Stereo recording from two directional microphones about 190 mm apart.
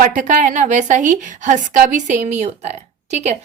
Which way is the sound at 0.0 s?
40° right (ahead or behind).